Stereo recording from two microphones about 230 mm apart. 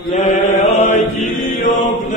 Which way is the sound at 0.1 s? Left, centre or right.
Left.